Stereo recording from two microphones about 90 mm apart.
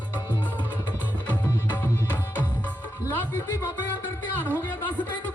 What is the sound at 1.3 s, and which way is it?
Music, 25° left (ahead or behind).